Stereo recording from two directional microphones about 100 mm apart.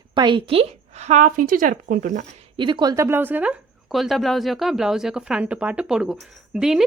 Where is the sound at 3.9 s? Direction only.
Centre (ahead or behind).